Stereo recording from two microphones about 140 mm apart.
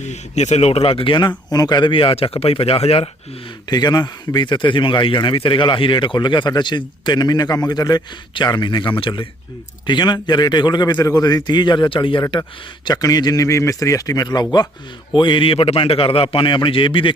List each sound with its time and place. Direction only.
0.0 s a man's voice: 55° left (ahead or behind)
3.7 s a man's voice: 30° left (ahead or behind)